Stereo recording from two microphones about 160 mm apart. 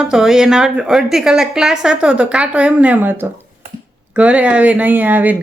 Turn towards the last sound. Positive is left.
turn(degrees=-10)  # may be behind; listen again after turning